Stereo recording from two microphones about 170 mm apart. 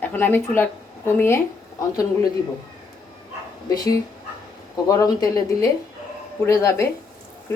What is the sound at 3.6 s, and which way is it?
A woman's voice, 20° left (ahead or behind).